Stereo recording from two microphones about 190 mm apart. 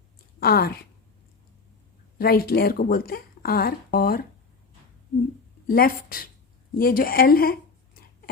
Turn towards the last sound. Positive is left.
turn(degrees=50)  # may be behind; listen again after turning